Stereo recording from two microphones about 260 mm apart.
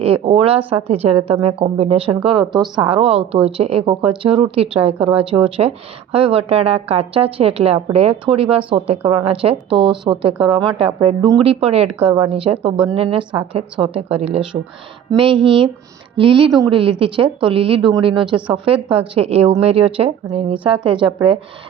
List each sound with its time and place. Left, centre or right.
0.0 s speech: right